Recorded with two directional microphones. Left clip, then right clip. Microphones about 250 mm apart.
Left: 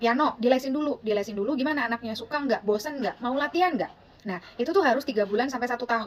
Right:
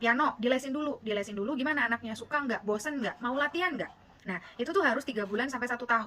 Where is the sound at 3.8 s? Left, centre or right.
Centre.